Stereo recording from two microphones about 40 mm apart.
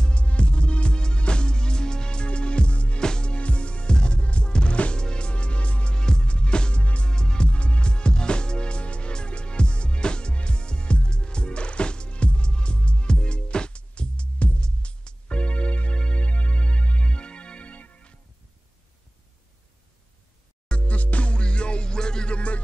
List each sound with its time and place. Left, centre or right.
0.0 s music: left
3.0 s music: left
5.9 s music: left
6.8 s music: left
7.1 s music: centre
7.5 s music: left
20.8 s music: left